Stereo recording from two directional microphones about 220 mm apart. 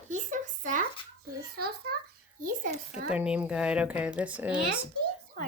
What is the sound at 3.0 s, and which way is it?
Speech, 5° right (ahead or behind).